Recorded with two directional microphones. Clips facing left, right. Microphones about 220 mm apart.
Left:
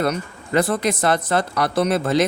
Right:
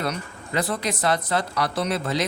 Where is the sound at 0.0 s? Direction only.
50° left (ahead or behind).